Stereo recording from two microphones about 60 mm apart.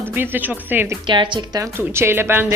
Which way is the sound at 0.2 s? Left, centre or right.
Right.